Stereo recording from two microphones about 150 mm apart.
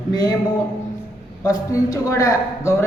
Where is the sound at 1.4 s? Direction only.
20° left (ahead or behind).